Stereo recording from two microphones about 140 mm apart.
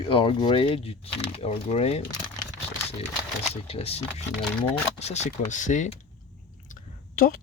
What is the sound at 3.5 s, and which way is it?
Speech, 45° left (ahead or behind).